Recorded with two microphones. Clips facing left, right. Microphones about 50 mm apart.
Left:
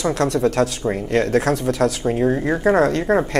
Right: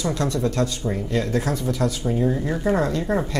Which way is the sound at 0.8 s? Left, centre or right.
Left.